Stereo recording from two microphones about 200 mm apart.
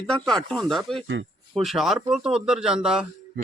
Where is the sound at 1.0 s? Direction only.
70° right (ahead or behind).